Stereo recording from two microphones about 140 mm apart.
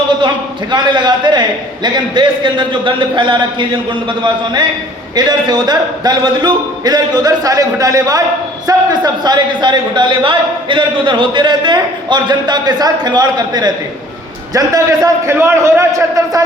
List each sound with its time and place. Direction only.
0.7 s a man's voice: 35° right (ahead or behind)
5.1 s a man's voice: 30° right (ahead or behind)